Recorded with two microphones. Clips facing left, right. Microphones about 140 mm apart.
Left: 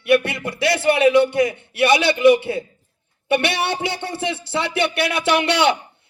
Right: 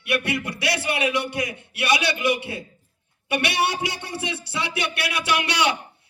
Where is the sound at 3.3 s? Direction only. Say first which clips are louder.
Left 3 dB; 25° left (ahead or behind).